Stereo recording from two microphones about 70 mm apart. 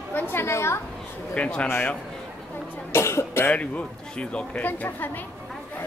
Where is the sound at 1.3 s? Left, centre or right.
Centre.